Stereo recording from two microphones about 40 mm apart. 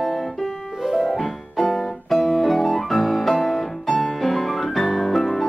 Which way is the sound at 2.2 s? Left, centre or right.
Centre.